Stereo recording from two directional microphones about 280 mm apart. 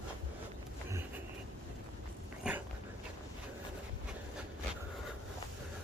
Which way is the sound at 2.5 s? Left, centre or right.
Centre.